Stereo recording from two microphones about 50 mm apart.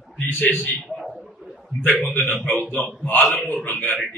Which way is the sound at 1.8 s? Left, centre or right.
Left.